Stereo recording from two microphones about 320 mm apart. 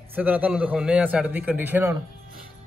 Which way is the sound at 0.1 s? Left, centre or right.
Centre.